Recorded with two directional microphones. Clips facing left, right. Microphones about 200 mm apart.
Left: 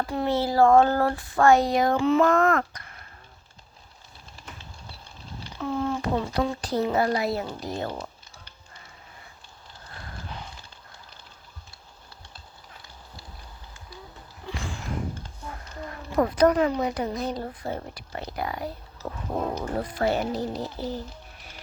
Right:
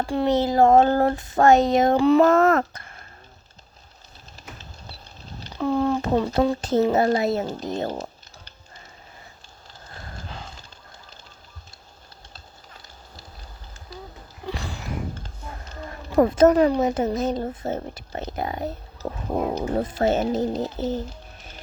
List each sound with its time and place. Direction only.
0.0 s speech: 30° right (ahead or behind)
2.0 s speech: 35° right (ahead or behind)
2.3 s speech: 25° right (ahead or behind)
5.5 s speech: 35° right (ahead or behind); by 7.9 s 20° right (ahead or behind)
7.9 s speech: 40° right (ahead or behind)
14.4 s a sound: 35° right (ahead or behind)
15.7 s a sound: 25° right (ahead or behind)
16.5 s speech: 35° right (ahead or behind)
16.8 s speech: 25° right (ahead or behind)